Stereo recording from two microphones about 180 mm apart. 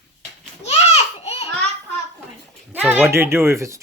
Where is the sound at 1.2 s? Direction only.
35° left (ahead or behind).